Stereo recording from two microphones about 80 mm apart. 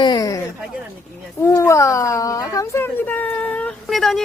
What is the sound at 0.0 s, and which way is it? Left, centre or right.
Speech, left.